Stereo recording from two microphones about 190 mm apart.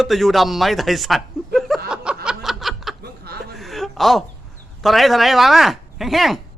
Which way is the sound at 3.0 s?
55° right (ahead or behind).